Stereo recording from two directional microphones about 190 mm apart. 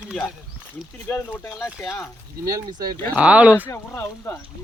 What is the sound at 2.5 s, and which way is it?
Speech, 20° right (ahead or behind).